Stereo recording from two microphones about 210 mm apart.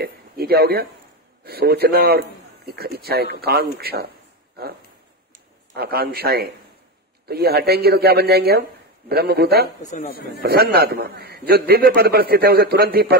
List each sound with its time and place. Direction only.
0.0 s a man's voice: 50° right (ahead or behind)